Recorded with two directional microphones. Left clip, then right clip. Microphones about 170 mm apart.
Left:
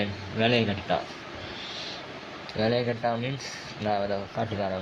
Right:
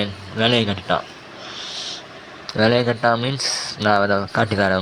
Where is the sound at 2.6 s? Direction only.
15° right (ahead or behind).